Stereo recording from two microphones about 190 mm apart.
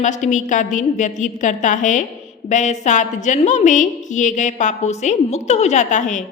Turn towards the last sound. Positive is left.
turn(degrees=40)  # may be behind; listen again after turning